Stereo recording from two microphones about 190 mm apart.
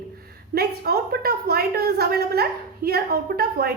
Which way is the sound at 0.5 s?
55° right (ahead or behind).